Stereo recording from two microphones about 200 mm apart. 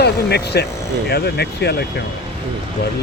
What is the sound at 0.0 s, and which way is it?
Speech, 55° left (ahead or behind).